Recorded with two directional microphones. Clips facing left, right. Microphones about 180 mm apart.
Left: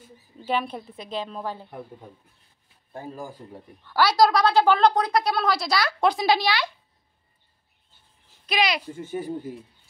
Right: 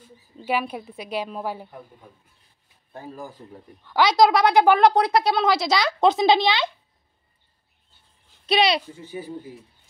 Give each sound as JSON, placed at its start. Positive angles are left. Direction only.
{"t": 0.4, "sound": "a woman's voice", "side_deg": -10}
{"t": 2.9, "sound": "speech", "side_deg": 10}
{"t": 3.8, "sound": "a woman's voice", "side_deg": -20}
{"t": 5.1, "sound": "speech", "side_deg": -25}
{"t": 8.5, "sound": "speech", "side_deg": -30}
{"t": 8.9, "sound": "speech", "side_deg": 50}